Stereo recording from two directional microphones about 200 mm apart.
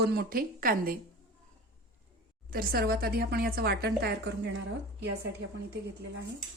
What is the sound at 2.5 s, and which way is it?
A woman's voice, 45° right (ahead or behind).